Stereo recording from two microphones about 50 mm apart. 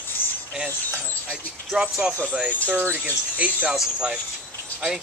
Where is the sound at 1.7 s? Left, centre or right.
Centre.